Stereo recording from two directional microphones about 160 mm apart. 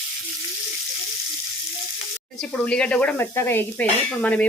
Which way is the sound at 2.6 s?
5° left (ahead or behind).